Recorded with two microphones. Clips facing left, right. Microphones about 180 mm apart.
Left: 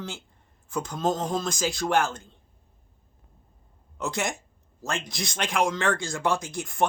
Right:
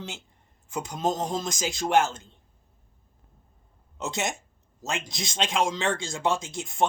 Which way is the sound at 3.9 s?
20° right (ahead or behind).